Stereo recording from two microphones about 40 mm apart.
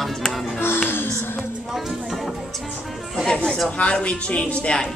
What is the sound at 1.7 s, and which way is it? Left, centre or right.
Speech, centre.